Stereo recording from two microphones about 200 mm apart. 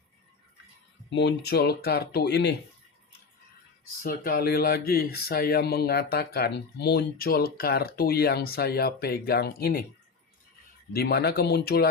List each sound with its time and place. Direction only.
1.1 s speech: 55° left (ahead or behind)
4.0 s speech: 45° left (ahead or behind)
10.9 s speech: 50° left (ahead or behind)